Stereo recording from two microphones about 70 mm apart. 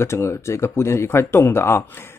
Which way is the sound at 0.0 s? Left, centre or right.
Left.